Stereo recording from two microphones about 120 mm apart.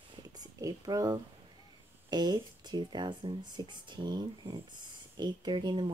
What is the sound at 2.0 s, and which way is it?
Speech, 35° right (ahead or behind).